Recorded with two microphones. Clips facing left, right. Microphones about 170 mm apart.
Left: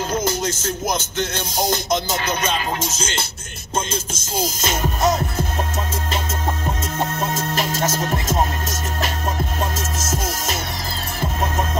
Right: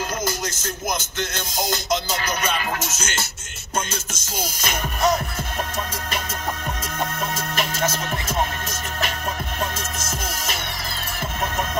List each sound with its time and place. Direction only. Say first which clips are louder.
0.1 s music: left 5 dB; 25° left (ahead or behind)
2.2 s speech: left 3 dB; 25° left (ahead or behind)
4.6 s speech: left 1 dB; 25° left (ahead or behind)
7.0 s music: left 3 dB; 30° left (ahead or behind)